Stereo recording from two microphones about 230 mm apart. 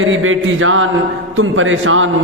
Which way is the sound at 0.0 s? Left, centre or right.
Right.